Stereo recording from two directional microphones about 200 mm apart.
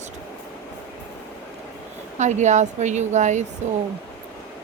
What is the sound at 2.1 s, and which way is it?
Speech, 35° right (ahead or behind).